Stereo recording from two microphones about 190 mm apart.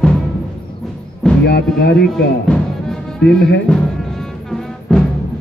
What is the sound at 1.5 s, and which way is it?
Speech, 60° left (ahead or behind).